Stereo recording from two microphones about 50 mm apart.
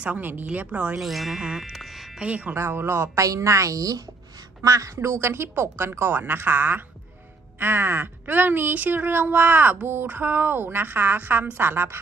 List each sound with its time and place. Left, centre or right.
0.0 s speech: right
0.7 s speech: right
0.9 s speech: centre
1.6 s music: centre
2.1 s speech: right
2.5 s a woman's voice: right
4.9 s a woman's voice: right